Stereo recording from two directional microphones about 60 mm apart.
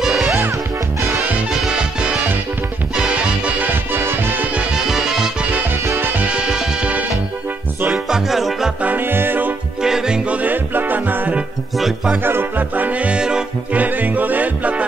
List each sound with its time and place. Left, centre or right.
0.0 s music: centre
1.5 s music: centre
3.2 s music: right
3.7 s music: right
4.7 s music: centre
5.9 s music: right
6.2 s music: centre
7.9 s music: centre
8.8 s music: right
9.8 s music: centre; by 11.3 s right
11.7 s music: centre
12.2 s music: right; by 13.4 s centre
13.7 s music: right